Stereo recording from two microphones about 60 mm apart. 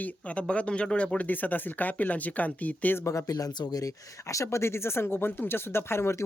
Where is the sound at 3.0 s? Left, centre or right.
Left.